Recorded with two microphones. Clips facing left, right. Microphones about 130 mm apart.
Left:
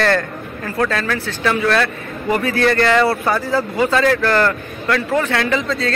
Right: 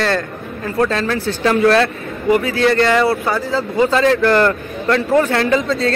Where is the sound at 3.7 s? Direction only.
25° right (ahead or behind).